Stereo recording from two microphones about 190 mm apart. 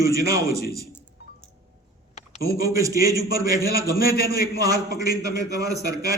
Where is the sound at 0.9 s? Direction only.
10° left (ahead or behind).